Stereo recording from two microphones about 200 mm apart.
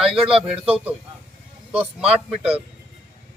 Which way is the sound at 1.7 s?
30° right (ahead or behind).